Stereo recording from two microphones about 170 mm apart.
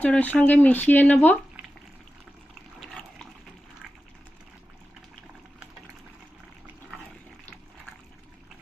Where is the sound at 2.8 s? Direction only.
5° left (ahead or behind).